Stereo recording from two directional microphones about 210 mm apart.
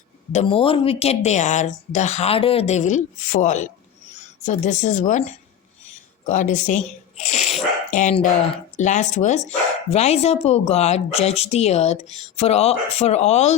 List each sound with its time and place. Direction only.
0.3 s speech: 25° left (ahead or behind)